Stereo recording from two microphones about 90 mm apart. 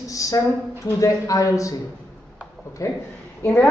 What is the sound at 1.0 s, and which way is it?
Speech, 40° left (ahead or behind).